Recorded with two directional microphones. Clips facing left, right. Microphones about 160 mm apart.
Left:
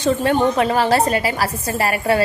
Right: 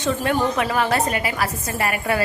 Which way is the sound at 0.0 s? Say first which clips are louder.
Left 4 dB; 30° left (ahead or behind).